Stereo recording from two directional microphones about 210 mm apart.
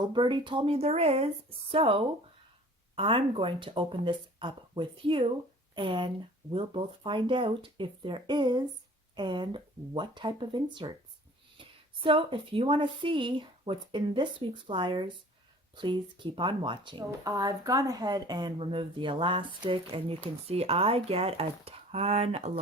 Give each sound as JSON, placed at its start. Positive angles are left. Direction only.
{"t": 0.0, "sound": "speech", "side_deg": -20}
{"t": 12.0, "sound": "speech", "side_deg": -25}